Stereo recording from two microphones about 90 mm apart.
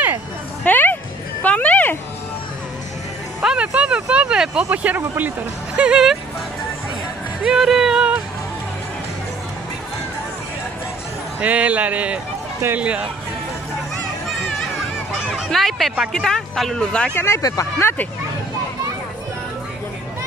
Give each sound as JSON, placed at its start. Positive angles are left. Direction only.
{"t": 0.7, "sound": "music", "side_deg": 20}
{"t": 1.4, "sound": "a sound", "side_deg": 15}
{"t": 3.4, "sound": "a sound", "side_deg": -15}
{"t": 4.6, "sound": "speech", "side_deg": -20}
{"t": 5.8, "sound": "a man's voice", "side_deg": -10}
{"t": 7.4, "sound": "music", "side_deg": -5}
{"t": 11.3, "sound": "a man's voice", "side_deg": -15}
{"t": 15.2, "sound": "speech", "side_deg": 0}
{"t": 17.1, "sound": "speech", "side_deg": 30}
{"t": 17.4, "sound": "speech", "side_deg": 45}
{"t": 17.7, "sound": "speech", "side_deg": 25}